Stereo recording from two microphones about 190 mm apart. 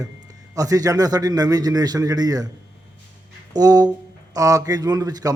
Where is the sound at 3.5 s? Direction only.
20° right (ahead or behind).